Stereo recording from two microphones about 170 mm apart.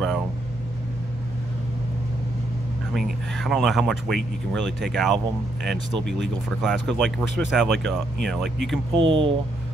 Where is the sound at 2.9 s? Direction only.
Centre (ahead or behind).